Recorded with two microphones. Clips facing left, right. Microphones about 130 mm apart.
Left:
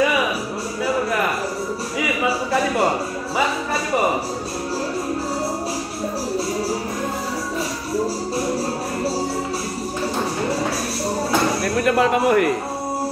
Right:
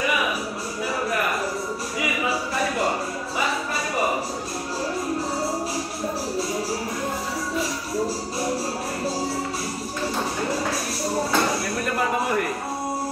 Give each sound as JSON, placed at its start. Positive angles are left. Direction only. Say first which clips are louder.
{"t": 11.8, "sound": "music", "louder": "left 9 dB", "side_deg": 85}